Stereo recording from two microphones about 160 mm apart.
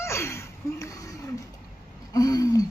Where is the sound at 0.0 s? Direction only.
15° left (ahead or behind).